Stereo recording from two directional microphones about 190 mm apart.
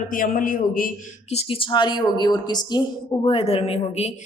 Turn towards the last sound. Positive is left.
turn(degrees=35)  # may be behind; listen again after turning